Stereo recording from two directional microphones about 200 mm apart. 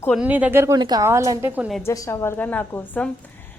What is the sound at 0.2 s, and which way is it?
A woman's voice, 10° right (ahead or behind).